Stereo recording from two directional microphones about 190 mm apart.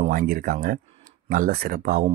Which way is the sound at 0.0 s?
50° right (ahead or behind).